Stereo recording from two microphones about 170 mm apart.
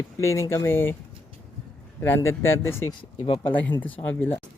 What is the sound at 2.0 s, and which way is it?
Speech, 10° left (ahead or behind).